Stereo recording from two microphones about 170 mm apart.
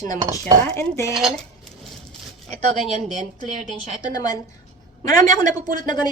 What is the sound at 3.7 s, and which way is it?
Speech, 20° left (ahead or behind).